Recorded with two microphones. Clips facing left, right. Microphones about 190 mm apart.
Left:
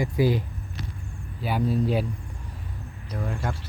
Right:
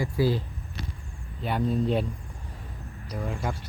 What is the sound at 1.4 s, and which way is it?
Speech, 5° left (ahead or behind).